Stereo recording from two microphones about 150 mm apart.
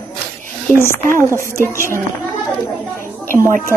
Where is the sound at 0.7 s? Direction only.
15° left (ahead or behind).